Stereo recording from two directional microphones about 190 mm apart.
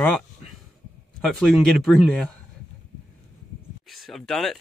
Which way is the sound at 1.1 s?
Centre (ahead or behind).